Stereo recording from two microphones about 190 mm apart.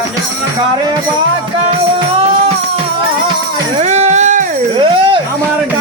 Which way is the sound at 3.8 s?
35° right (ahead or behind).